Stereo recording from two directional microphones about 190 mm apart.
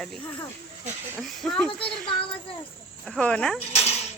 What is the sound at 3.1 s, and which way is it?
Speech, 5° left (ahead or behind).